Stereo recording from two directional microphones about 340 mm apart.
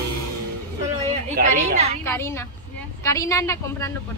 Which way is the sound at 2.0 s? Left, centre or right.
Centre.